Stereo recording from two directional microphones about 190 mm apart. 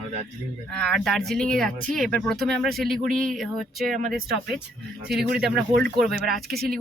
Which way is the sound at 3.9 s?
45° right (ahead or behind).